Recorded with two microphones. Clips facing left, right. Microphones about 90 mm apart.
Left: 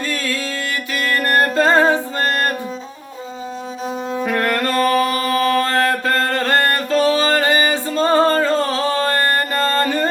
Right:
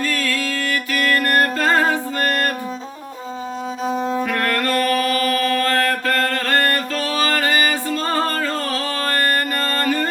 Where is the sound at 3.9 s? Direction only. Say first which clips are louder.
Right 3 dB; 45° right (ahead or behind).